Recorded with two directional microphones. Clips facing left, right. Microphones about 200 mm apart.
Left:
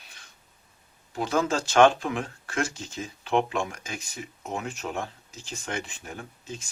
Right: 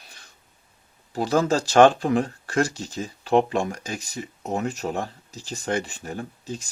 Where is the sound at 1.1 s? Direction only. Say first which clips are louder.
Right 5 dB; 35° right (ahead or behind).